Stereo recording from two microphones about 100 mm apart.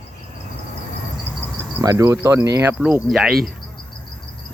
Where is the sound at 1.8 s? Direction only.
40° right (ahead or behind).